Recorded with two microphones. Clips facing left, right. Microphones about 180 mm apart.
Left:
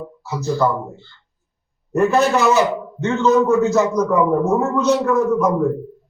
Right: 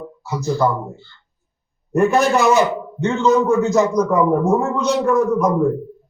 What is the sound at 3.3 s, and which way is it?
Speech, 5° left (ahead or behind).